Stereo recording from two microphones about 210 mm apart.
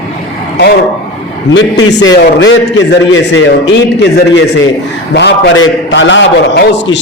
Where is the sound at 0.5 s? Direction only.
50° left (ahead or behind).